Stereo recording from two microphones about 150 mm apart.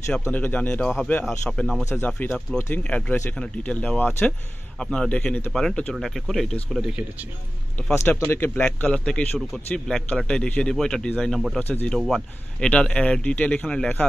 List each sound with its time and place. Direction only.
0.2 s speech: 10° left (ahead or behind)
1.9 s speech: 15° left (ahead or behind)
7.9 s speech: 20° left (ahead or behind); by 11.6 s centre (ahead or behind)
11.6 s speech: 10° left (ahead or behind)